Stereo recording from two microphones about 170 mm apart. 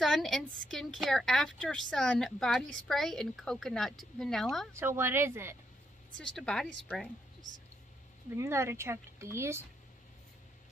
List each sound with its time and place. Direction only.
0.0 s a woman's voice: centre (ahead or behind)
4.7 s speech: 15° right (ahead or behind)
6.3 s a woman's voice: 5° left (ahead or behind)
8.4 s speech: 15° right (ahead or behind)